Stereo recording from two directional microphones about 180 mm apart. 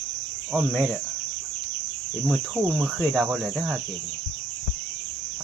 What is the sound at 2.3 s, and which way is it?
Speech, centre (ahead or behind).